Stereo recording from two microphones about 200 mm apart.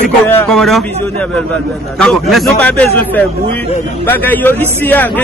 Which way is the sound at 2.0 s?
Centre (ahead or behind).